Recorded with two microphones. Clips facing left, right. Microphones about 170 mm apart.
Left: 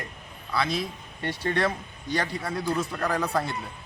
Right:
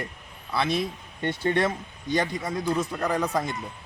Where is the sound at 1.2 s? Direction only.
25° right (ahead or behind).